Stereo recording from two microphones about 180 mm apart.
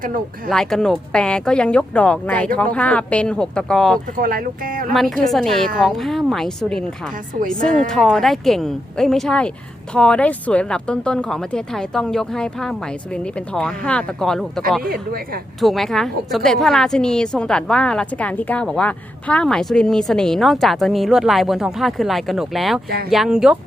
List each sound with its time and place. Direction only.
0.0 s speech: 50° right (ahead or behind)
0.5 s a woman's voice: 5° left (ahead or behind)
4.2 s speech: 55° right (ahead or behind)
4.9 s a woman's voice: centre (ahead or behind)
14.8 s speech: 55° right (ahead or behind)
15.6 s a woman's voice: centre (ahead or behind)